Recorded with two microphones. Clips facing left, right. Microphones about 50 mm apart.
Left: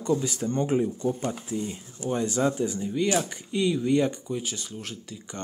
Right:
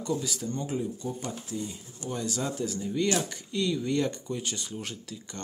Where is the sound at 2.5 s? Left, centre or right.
Left.